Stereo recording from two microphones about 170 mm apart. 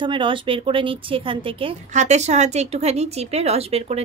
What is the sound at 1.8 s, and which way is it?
A woman's voice, 45° right (ahead or behind).